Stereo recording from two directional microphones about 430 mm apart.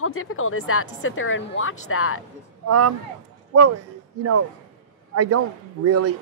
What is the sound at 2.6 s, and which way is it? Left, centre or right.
Speech, right.